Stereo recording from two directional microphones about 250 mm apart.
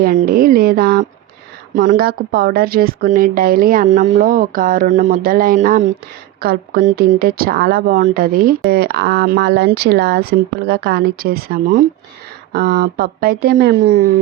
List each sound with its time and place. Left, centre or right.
0.0 s a woman's voice: right